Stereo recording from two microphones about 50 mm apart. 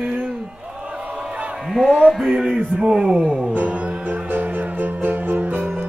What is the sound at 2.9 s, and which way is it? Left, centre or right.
Speech, centre.